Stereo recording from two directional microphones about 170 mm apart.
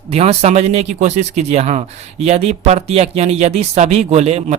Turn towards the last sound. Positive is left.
turn(degrees=-40)  # may be behind; listen again after turning